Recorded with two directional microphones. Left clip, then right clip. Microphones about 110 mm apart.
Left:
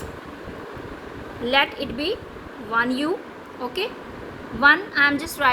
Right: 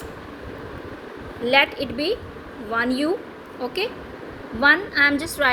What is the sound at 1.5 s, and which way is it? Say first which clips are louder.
A woman's voice: right 2 dB; 20° right (ahead or behind).